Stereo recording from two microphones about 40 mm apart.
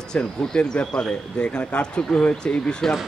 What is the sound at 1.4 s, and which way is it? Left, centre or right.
Speech, left.